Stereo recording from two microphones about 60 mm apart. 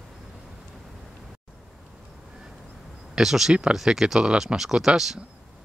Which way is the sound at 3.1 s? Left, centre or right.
Centre.